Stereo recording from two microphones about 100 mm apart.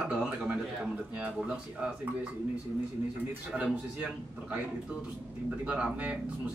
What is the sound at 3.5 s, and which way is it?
Speech, 10° right (ahead or behind).